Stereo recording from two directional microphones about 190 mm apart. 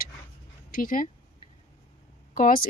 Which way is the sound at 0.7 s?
45° left (ahead or behind).